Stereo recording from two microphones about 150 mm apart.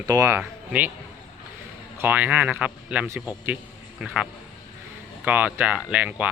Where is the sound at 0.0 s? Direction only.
25° right (ahead or behind).